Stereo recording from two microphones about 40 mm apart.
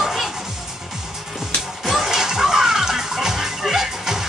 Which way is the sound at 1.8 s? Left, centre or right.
Centre.